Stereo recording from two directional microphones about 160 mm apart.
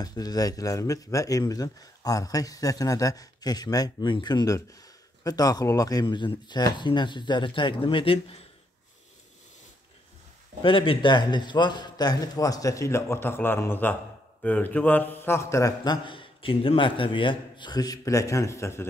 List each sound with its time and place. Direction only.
0.0 s a man's voice: 25° left (ahead or behind)
10.6 s a man's voice: 35° left (ahead or behind); by 18.9 s 15° left (ahead or behind)